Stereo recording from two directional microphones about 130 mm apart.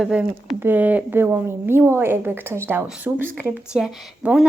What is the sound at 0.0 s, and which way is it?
A woman's voice, 5° right (ahead or behind).